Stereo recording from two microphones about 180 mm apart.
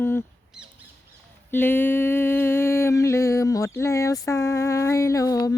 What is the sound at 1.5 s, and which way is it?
Mantra, 10° left (ahead or behind).